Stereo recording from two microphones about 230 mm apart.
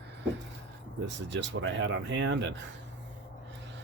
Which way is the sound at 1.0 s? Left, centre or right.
Right.